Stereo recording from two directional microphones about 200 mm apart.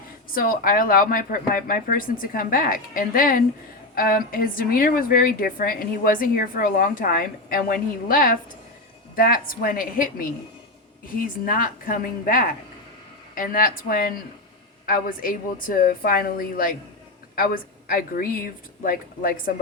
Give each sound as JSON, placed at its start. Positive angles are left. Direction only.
{"t": 0.3, "sound": "a woman's voice", "side_deg": 45}